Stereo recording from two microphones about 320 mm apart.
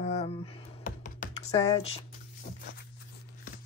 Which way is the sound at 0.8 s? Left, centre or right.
Left.